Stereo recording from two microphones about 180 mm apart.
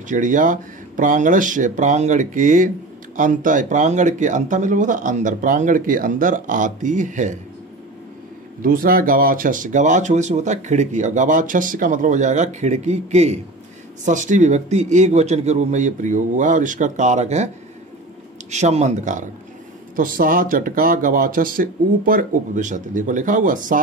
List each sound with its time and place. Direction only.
0.1 s speech: 45° right (ahead or behind)
8.6 s a man's voice: 50° right (ahead or behind)
18.5 s a man's voice: 40° right (ahead or behind)